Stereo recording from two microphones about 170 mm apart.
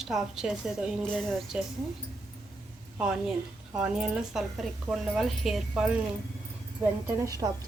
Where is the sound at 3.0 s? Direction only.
5° right (ahead or behind).